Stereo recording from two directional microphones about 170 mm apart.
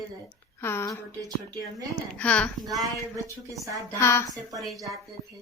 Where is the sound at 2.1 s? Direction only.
10° left (ahead or behind).